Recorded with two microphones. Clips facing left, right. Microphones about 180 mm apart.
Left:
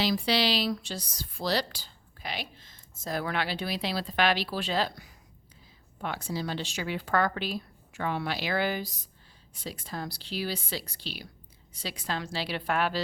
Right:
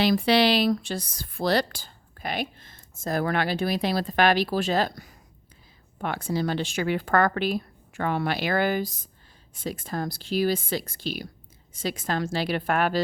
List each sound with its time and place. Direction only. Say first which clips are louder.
0.0 s speech: right 6 dB; 55° right (ahead or behind)
6.0 s speech: right 6 dB; 55° right (ahead or behind)